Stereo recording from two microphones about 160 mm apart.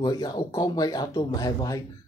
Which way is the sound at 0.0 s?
25° left (ahead or behind).